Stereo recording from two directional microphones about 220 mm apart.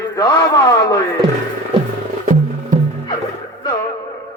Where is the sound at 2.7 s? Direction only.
35° right (ahead or behind).